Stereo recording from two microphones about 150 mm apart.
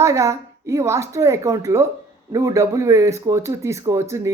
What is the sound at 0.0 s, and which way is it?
A woman's voice, 20° right (ahead or behind).